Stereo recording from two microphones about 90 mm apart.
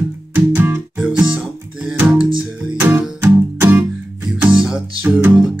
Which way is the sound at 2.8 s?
20° right (ahead or behind).